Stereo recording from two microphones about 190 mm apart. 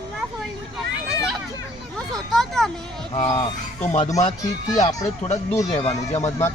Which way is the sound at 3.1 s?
35° left (ahead or behind).